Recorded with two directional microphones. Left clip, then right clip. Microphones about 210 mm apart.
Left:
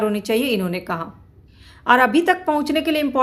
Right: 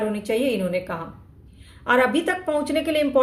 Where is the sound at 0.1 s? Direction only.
45° left (ahead or behind).